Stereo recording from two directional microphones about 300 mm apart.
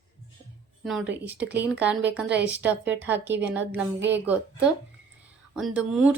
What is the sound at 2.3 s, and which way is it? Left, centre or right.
Speech, right.